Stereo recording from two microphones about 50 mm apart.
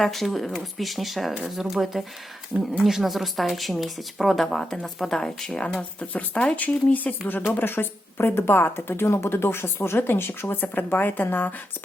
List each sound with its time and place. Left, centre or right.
0.0 s speech: centre
6.1 s speech: left